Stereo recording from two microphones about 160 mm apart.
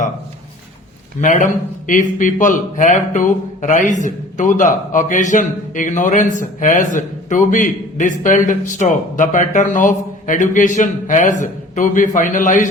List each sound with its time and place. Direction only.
1.2 s speech: 50° left (ahead or behind)